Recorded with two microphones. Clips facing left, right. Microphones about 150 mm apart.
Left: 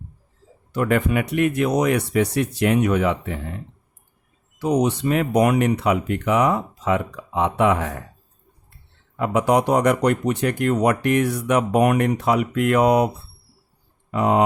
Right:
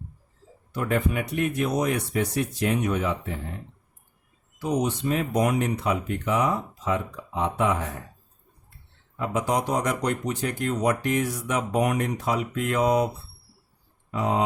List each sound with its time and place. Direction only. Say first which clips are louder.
0.7 s speech: left 5 dB; 80° left
4.5 s speech: left 6 dB; 70° left (ahead or behind)
9.1 s speech: left 7 dB; 65° left (ahead or behind)
14.1 s speech: left 6 dB; 65° left (ahead or behind)